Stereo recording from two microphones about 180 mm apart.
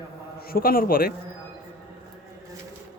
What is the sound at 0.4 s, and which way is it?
Speech, 55° left (ahead or behind).